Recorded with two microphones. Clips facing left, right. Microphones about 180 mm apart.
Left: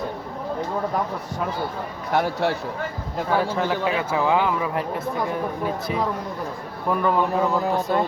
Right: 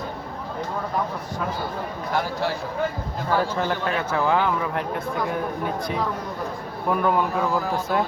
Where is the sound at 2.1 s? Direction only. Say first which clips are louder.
Left 4 dB; 65° left (ahead or behind).